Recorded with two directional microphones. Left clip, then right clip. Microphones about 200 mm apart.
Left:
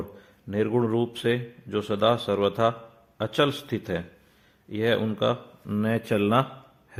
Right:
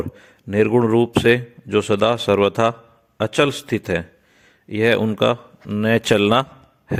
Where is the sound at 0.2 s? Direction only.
40° right (ahead or behind).